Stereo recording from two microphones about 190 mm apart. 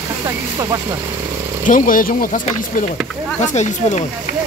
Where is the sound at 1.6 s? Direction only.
45° left (ahead or behind).